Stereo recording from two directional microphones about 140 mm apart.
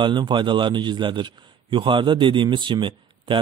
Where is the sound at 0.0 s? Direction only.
35° right (ahead or behind).